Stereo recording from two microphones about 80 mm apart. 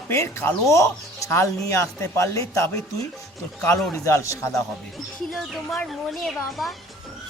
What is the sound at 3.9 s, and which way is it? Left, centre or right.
Speech, left.